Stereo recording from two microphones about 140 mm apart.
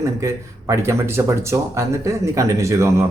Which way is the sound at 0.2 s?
20° right (ahead or behind).